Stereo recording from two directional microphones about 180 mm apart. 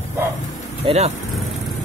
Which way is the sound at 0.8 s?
35° right (ahead or behind).